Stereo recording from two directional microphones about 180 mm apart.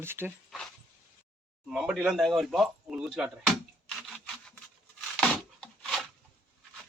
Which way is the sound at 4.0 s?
5° left (ahead or behind).